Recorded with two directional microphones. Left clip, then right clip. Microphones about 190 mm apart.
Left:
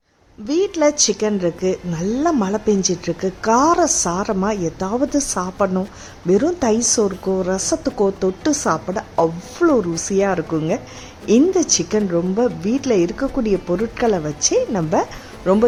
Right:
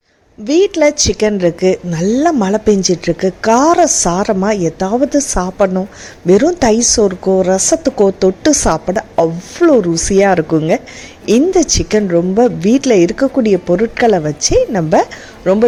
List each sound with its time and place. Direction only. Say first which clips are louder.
0.4 s a woman's voice: right 6 dB; 15° right (ahead or behind)